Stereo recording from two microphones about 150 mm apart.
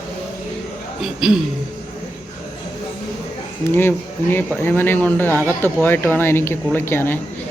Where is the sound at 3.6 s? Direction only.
15° left (ahead or behind).